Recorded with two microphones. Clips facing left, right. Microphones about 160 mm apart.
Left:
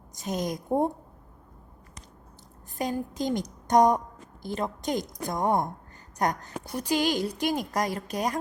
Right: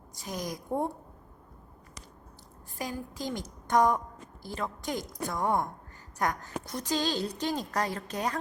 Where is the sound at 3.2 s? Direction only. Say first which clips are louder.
Left 7 dB; 20° left (ahead or behind).